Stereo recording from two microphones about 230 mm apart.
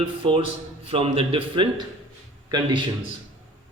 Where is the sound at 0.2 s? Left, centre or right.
Right.